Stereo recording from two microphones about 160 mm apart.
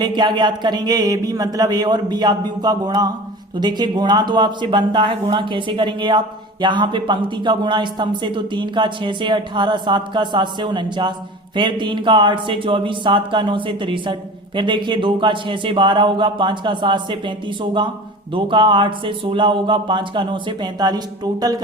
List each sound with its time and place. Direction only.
0.0 s speech: 25° right (ahead or behind)